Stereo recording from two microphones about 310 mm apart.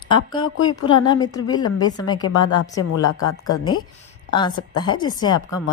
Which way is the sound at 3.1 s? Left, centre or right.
Left.